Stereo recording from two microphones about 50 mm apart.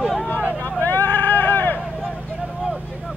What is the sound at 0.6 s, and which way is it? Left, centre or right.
Vehicle, left.